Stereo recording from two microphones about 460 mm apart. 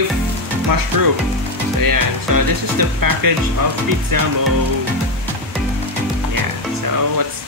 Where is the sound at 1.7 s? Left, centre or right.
Right.